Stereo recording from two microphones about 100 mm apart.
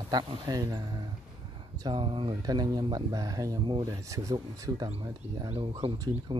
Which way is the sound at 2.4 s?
40° right (ahead or behind).